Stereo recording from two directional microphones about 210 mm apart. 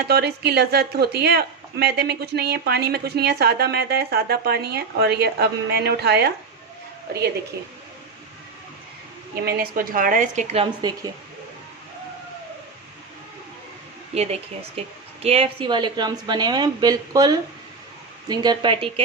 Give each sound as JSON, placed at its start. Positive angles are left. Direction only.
{"t": 0.1, "sound": "a woman's voice", "side_deg": -50}
{"t": 9.3, "sound": "a woman's voice", "side_deg": -50}
{"t": 14.1, "sound": "a woman's voice", "side_deg": -30}